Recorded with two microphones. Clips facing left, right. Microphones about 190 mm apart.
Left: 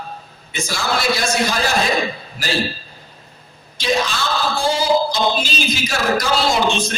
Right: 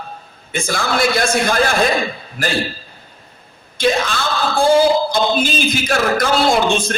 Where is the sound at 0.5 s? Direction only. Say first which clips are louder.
Right 3 dB; 55° right (ahead or behind).